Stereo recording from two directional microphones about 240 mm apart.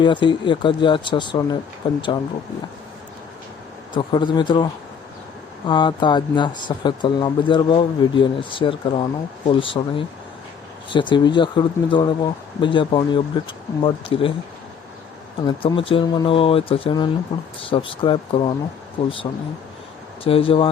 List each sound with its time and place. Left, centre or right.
0.0 s speech: centre
3.9 s speech: centre
15.4 s speech: left